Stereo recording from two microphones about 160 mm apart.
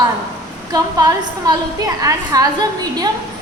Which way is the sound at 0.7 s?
20° right (ahead or behind).